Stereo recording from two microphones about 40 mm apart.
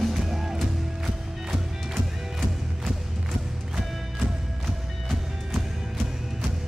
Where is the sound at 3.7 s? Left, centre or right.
Centre.